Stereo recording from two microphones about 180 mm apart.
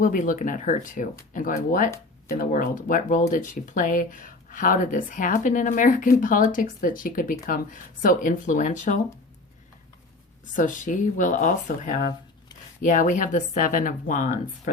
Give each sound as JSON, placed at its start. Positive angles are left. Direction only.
{"t": 0.0, "sound": "speech", "side_deg": 50}
{"t": 10.4, "sound": "speech", "side_deg": 45}